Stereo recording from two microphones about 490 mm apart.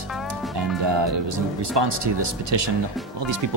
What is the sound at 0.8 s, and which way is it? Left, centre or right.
Speech, right.